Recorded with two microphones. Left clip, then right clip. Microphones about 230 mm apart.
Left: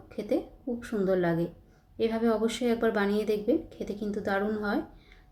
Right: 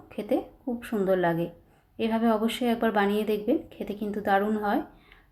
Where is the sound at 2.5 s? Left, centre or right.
Right.